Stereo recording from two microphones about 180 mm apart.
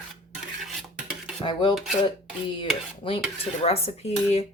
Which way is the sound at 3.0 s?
30° left (ahead or behind).